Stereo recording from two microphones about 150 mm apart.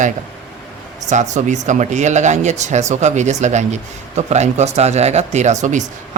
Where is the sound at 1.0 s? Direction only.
50° right (ahead or behind).